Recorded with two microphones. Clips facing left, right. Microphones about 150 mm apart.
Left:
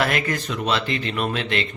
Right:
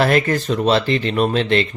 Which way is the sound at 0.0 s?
35° right (ahead or behind).